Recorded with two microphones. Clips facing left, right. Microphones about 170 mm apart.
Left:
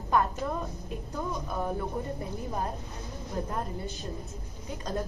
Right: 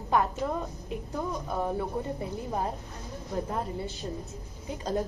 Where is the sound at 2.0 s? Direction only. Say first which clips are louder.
Right 2 dB; 20° right (ahead or behind).